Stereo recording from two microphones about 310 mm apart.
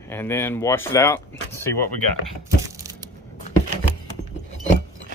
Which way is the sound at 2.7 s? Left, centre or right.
Centre.